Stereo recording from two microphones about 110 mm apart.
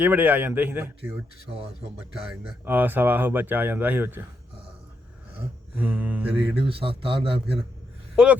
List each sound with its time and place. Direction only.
0.0 s speech: 15° right (ahead or behind)
2.6 s speech: 15° right (ahead or behind)
5.7 s speech: 15° right (ahead or behind)
6.6 s speech: 55° right (ahead or behind)
8.1 s speech: 10° right (ahead or behind)